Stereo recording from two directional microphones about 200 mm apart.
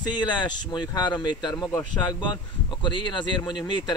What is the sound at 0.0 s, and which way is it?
Speech, 20° left (ahead or behind).